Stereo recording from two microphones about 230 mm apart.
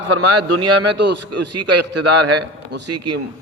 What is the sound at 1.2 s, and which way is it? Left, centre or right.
A man's voice, right.